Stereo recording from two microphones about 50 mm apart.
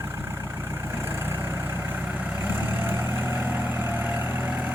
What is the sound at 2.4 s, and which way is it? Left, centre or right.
Vehicle, right.